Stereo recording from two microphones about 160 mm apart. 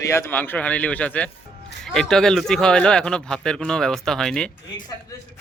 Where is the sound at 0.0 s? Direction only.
15° left (ahead or behind).